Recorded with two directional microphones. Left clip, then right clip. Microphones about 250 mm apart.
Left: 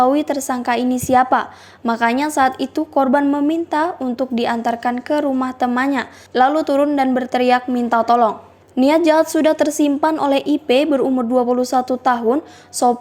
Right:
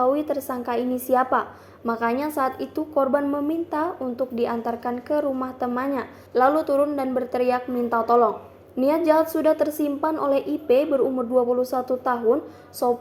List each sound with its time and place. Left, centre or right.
0.0 s a woman's voice: left